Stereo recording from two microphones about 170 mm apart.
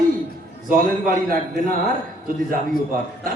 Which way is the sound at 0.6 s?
55° right (ahead or behind).